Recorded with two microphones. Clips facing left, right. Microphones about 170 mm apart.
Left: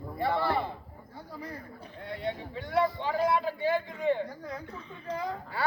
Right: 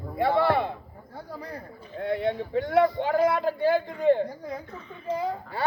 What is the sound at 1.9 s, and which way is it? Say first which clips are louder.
A man's voice: right 9 dB; 60° right (ahead or behind).